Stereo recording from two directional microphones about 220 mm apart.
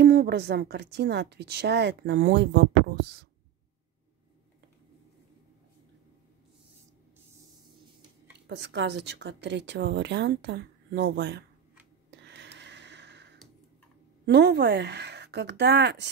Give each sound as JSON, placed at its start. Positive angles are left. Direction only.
{"t": 0.0, "sound": "a woman's voice", "side_deg": -50}
{"t": 8.5, "sound": "a woman's voice", "side_deg": -50}
{"t": 12.2, "sound": "a sound", "side_deg": -50}
{"t": 14.2, "sound": "a woman's voice", "side_deg": -50}